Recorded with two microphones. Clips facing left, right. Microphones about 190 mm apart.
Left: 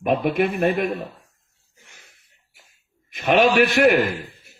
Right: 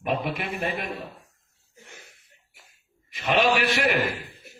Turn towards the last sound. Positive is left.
turn(degrees=55)  # may be behind; listen again after turning